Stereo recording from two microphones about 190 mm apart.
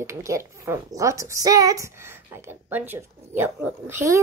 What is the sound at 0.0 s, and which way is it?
A woman's voice, 15° right (ahead or behind).